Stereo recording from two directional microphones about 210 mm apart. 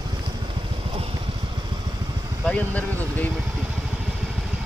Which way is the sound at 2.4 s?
5° left (ahead or behind).